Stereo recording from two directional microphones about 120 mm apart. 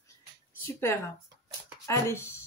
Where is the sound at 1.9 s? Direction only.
20° left (ahead or behind).